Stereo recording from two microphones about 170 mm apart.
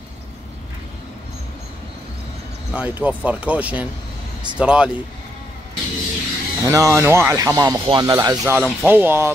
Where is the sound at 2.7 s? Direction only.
10° right (ahead or behind).